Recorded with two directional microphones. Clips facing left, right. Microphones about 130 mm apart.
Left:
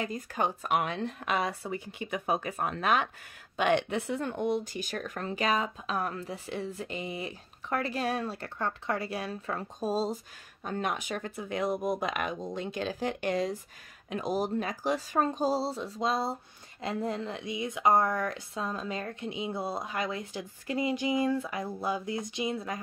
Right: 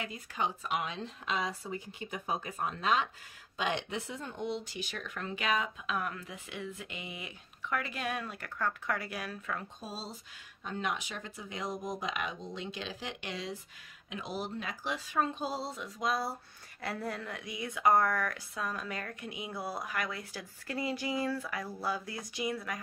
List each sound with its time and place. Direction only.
0.0 s speech: 45° left (ahead or behind); by 22.8 s 25° left (ahead or behind)